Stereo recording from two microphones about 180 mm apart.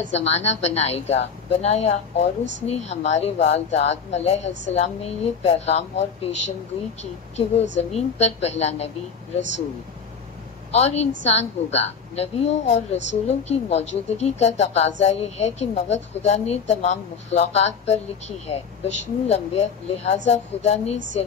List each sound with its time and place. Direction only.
0.1 s a woman's voice: 35° left (ahead or behind)
10.7 s a woman's voice: 35° left (ahead or behind)